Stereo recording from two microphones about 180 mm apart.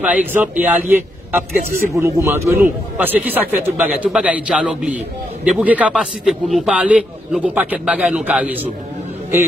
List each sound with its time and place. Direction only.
0.0 s a man's voice: 10° right (ahead or behind)